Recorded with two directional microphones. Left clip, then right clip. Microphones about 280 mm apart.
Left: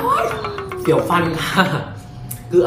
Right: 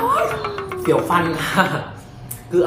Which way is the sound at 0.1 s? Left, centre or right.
Centre.